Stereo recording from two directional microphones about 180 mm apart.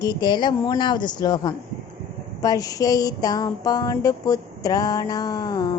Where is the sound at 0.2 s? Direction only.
25° left (ahead or behind).